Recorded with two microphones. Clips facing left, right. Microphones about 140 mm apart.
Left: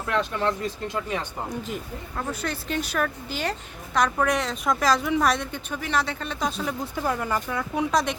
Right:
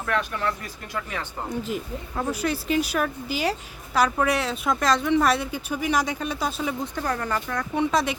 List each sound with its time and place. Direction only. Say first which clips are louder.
0.0 s speech: left 1 dB; 20° left (ahead or behind)
1.6 s speech: right 3 dB; 5° right (ahead or behind)
6.9 s speech: left 1 dB; 10° left (ahead or behind)